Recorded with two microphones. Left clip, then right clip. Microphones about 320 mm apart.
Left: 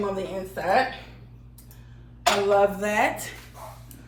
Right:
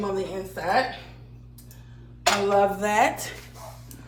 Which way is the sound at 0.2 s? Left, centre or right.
Centre.